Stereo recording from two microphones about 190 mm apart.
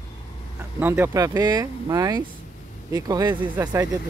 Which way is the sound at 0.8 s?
10° right (ahead or behind).